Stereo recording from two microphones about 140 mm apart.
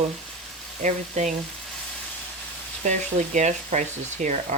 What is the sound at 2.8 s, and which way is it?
Speech, 60° right (ahead or behind).